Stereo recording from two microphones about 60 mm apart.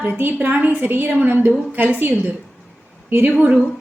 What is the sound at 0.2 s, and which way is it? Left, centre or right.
A woman's voice, right.